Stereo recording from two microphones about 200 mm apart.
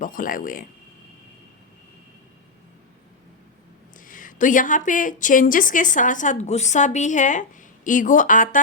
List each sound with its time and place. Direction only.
0.0 s speech: 45° left (ahead or behind)
4.0 s a woman's voice: 40° left (ahead or behind)